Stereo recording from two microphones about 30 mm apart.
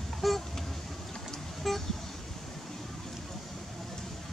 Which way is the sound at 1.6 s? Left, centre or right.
Centre.